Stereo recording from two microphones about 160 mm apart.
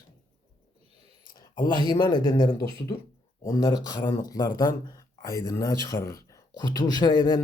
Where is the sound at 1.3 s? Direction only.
25° left (ahead or behind).